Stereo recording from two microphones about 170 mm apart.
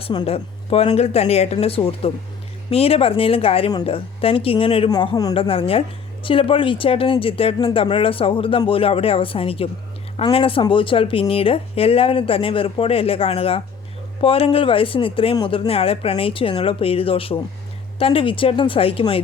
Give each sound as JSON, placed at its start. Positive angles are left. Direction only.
{"t": 0.0, "sound": "speech", "side_deg": 30}
{"t": 5.3, "sound": "speech", "side_deg": 35}